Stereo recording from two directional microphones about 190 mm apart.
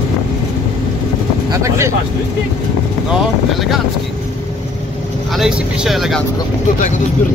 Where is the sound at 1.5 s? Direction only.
15° right (ahead or behind).